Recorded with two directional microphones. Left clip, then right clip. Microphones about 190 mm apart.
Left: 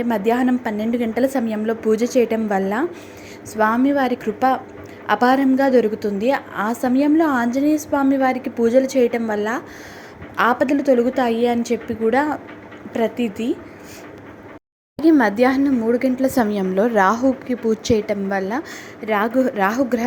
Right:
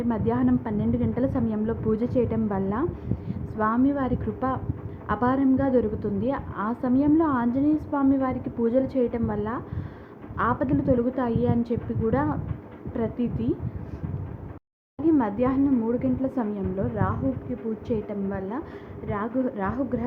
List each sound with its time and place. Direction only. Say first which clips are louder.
0.1 s a woman's voice: left 7 dB; 20° left (ahead or behind)
15.2 s a woman's voice: left 8 dB; 25° left (ahead or behind); by 17.1 s 50° left (ahead or behind)
17.8 s a woman's voice: left 10 dB; 30° left (ahead or behind)